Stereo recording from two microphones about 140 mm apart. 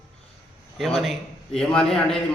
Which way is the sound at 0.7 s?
Centre (ahead or behind).